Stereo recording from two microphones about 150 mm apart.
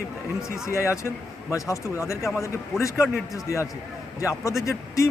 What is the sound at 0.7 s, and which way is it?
Speech, 20° left (ahead or behind).